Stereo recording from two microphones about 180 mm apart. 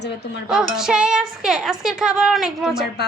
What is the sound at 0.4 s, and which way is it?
Speech, 5° right (ahead or behind).